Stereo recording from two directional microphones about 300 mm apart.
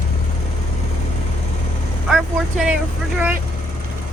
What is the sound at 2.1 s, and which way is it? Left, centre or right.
Vehicle, centre.